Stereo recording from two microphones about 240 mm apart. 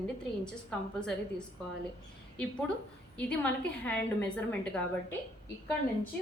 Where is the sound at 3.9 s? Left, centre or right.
Centre.